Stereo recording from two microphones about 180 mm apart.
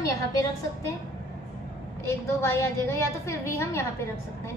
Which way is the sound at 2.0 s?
15° left (ahead or behind).